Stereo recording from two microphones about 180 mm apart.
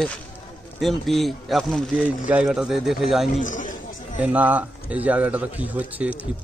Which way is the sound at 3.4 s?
45° left (ahead or behind).